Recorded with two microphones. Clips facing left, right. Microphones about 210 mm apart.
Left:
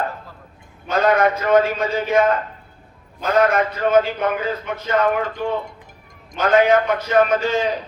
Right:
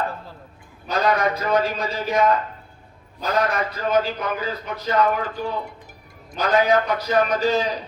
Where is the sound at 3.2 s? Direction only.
35° right (ahead or behind).